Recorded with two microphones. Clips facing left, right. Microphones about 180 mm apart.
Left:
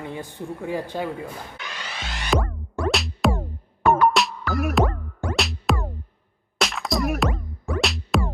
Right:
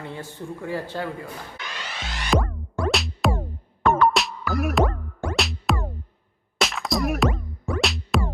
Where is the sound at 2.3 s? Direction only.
Centre (ahead or behind).